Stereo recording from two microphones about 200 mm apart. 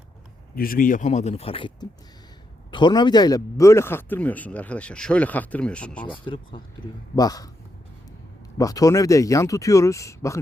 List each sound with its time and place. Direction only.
0.5 s a man's voice: 45° left (ahead or behind); by 6.1 s 5° left (ahead or behind)
6.1 s a man's voice: 25° left (ahead or behind)
8.5 s a man's voice: 15° left (ahead or behind)